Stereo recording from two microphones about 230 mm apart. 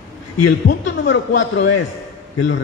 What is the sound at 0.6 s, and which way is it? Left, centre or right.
Speech, left.